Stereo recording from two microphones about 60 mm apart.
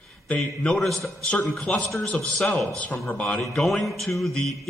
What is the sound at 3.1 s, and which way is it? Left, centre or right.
Speech, left.